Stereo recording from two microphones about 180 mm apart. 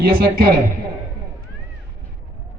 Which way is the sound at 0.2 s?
60° right (ahead or behind).